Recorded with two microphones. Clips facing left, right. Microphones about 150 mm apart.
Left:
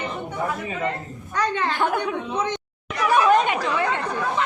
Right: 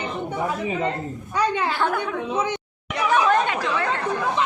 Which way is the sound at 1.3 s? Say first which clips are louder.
Right 1 dB; 10° right (ahead or behind).